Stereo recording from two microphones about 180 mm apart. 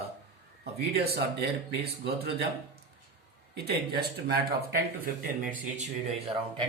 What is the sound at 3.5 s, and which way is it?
Speech, 65° right (ahead or behind).